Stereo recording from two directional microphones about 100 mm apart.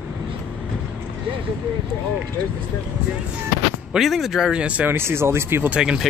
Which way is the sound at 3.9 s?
Centre (ahead or behind).